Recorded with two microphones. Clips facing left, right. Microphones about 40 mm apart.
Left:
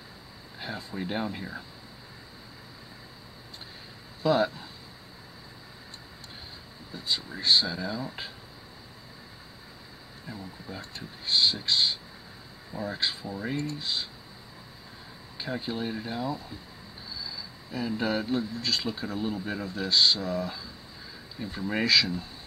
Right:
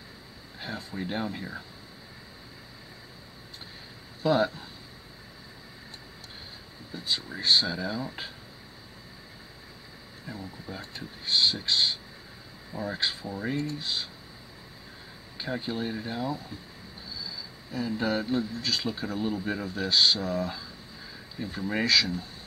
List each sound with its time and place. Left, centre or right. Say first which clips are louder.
0.6 s speech: even; centre
4.2 s speech: even; centre
6.9 s speech: even; centre
10.2 s speech: right 1 dB; centre
15.3 s speech: right 1 dB; centre
17.1 s a sound: even; centre
17.6 s speech: even; centre